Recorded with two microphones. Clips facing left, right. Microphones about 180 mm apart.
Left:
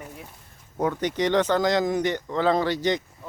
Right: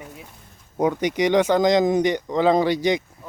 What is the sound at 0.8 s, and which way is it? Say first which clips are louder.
Speech: right 4 dB; 15° right (ahead or behind).